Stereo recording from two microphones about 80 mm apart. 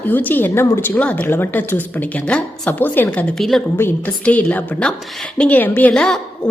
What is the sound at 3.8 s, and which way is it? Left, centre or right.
A woman's voice, centre.